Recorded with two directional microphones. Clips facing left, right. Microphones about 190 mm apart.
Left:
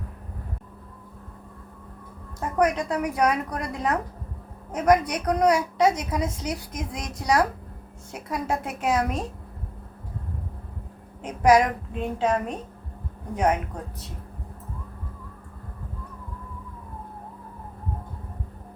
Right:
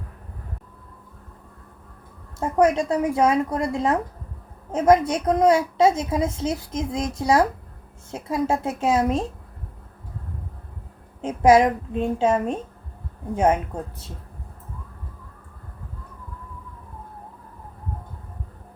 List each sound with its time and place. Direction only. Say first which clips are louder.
2.4 s a woman's voice: right 4 dB; 25° right (ahead or behind)
11.2 s a woman's voice: right 3 dB; 25° right (ahead or behind)